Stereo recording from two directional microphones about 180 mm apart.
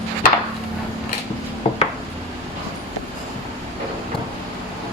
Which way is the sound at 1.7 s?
30° left (ahead or behind).